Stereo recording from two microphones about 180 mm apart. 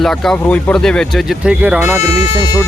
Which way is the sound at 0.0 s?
Centre (ahead or behind).